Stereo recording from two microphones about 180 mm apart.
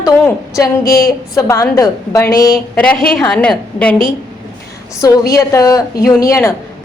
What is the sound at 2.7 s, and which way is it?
A woman's voice, 10° left (ahead or behind).